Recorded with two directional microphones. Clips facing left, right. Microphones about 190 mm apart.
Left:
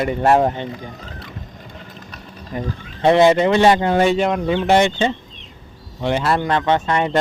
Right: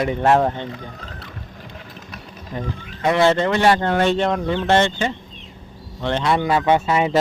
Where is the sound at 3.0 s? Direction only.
25° left (ahead or behind).